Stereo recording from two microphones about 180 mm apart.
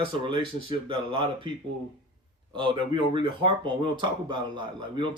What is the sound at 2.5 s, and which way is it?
Speech, 25° right (ahead or behind).